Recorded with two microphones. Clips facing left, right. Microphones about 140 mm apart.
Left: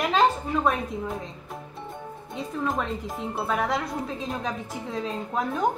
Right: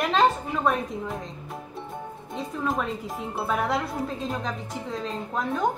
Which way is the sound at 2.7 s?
Centre (ahead or behind).